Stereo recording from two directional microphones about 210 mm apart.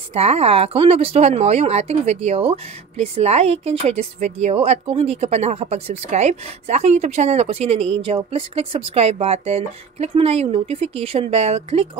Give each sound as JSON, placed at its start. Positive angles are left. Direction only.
{"t": 0.1, "sound": "speech", "side_deg": -30}